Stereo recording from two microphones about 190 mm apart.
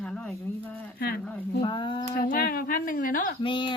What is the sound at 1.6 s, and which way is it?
Speech, 25° left (ahead or behind).